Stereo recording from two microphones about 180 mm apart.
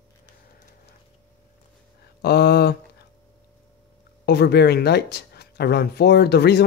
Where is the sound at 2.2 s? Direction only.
65° left (ahead or behind).